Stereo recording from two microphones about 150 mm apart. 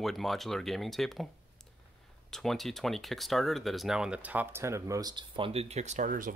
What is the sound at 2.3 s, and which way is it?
Speech, centre (ahead or behind).